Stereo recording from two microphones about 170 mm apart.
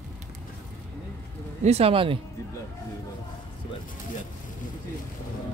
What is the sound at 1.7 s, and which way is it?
Speech, 35° right (ahead or behind).